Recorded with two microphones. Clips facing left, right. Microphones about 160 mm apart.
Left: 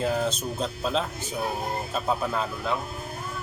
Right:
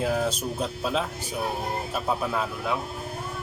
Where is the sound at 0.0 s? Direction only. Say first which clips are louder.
Even; 5° right (ahead or behind).